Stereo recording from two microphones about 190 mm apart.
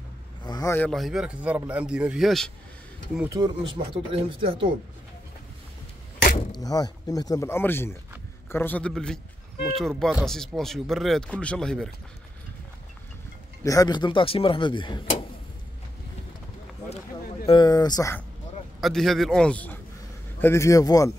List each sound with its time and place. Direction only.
0.5 s speech: 15° left (ahead or behind)
3.3 s speech: 20° right (ahead or behind)
6.5 s a man's voice: 20° left (ahead or behind); by 11.9 s 5° left (ahead or behind)
13.7 s speech: 20° left (ahead or behind)
17.5 s speech: 20° left (ahead or behind)
18.8 s a man's voice: centre (ahead or behind); by 21.1 s 20° left (ahead or behind)